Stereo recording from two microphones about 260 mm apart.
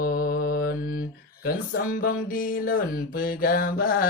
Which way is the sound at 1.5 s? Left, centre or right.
Left.